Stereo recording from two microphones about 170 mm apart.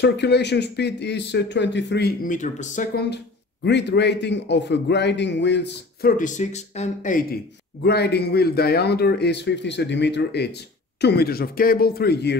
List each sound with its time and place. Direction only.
0.0 s speech: 85° left
2.2 s speech: 45° left (ahead or behind)
3.6 s a man's voice: 90° left; by 7.2 s 45° left (ahead or behind)
7.8 s speech: 75° left (ahead or behind)
11.0 s speech: 75° left (ahead or behind)